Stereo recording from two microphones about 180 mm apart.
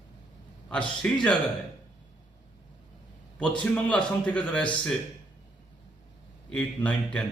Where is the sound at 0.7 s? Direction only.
5° left (ahead or behind).